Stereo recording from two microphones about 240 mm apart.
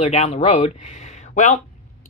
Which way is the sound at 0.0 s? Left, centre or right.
Left.